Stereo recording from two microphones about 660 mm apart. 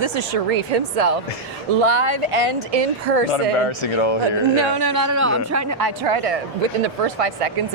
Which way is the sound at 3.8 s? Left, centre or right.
Left.